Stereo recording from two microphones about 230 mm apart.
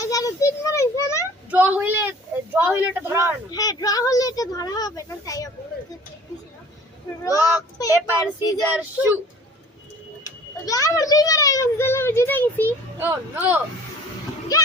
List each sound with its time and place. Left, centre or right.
0.0 s a sound: centre
1.5 s a woman's voice: centre
3.5 s a child's voice: centre
7.3 s a child's voice: centre
10.2 s a child's voice: centre
13.0 s a woman's voice: centre